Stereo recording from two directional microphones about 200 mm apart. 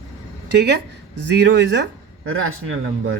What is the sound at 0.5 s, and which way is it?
Speech, 55° right (ahead or behind).